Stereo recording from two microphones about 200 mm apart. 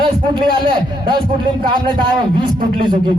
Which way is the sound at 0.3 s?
25° right (ahead or behind).